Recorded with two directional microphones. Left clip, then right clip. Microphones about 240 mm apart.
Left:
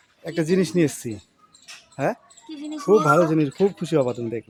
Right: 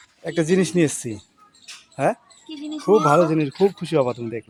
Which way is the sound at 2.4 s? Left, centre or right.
Centre.